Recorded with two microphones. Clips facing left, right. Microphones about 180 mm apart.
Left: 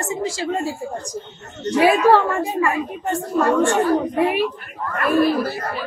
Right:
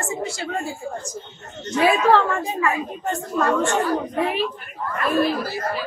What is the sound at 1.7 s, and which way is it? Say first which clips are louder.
Speech: left 3 dB; 10° left (ahead or behind).